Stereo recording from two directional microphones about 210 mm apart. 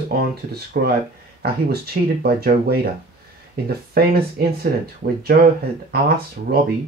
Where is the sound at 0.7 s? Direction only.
45° right (ahead or behind).